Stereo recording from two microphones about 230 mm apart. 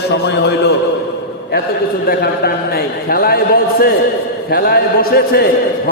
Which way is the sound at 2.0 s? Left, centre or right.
Left.